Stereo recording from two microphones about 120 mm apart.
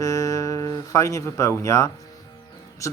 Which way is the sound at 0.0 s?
30° left (ahead or behind).